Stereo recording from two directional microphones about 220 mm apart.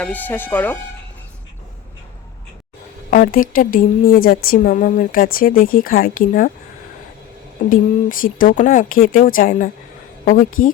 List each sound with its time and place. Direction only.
0.0 s speech: 10° left (ahead or behind)
3.1 s a woman's voice: 40° left (ahead or behind)
8.2 s a woman's voice: 40° left (ahead or behind)